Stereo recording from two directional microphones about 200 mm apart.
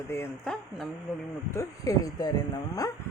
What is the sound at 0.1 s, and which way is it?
Speech, 10° left (ahead or behind).